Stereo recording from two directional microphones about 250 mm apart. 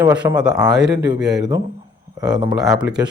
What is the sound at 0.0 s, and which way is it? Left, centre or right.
Speech, centre.